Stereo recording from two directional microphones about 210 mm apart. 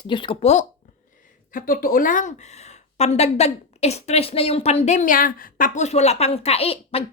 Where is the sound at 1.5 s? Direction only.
40° left (ahead or behind).